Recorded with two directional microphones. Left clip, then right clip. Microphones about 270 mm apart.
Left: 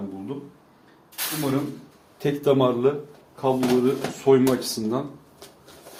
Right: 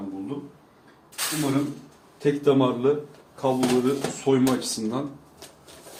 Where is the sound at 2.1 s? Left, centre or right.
Left.